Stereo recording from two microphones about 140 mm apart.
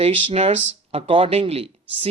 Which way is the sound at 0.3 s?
45° right (ahead or behind).